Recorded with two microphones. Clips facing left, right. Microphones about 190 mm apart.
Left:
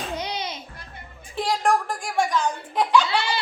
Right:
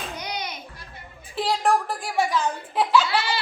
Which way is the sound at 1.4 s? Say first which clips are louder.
Even; 5° right (ahead or behind).